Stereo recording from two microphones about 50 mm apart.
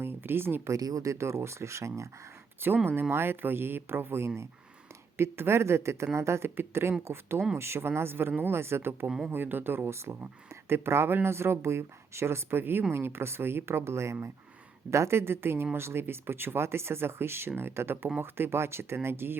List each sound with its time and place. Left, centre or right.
0.0 s speech: right
0.7 s speech: right
2.8 s speech: right
9.0 s speech: centre
9.3 s speech: right